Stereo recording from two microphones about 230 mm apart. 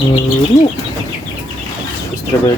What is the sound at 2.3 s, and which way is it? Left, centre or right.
Speech, centre.